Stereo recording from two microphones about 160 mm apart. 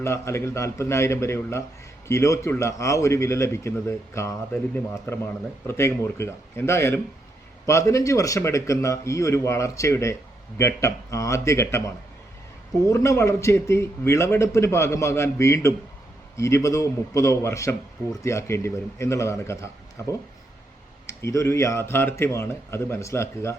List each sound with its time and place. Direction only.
0.0 s a man's voice: 15° left (ahead or behind)
12.9 s a man's voice: 15° left (ahead or behind)